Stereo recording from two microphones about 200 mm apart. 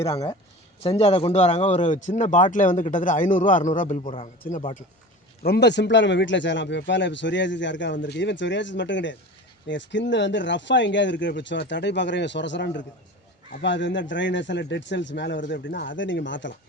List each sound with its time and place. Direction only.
0.0 s speech: 20° left (ahead or behind)
0.8 s a man's voice: 30° left (ahead or behind)
5.4 s a man's voice: 55° left (ahead or behind)